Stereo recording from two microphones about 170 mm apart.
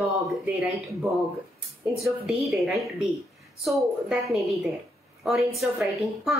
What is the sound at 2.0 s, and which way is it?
A woman's voice, centre (ahead or behind).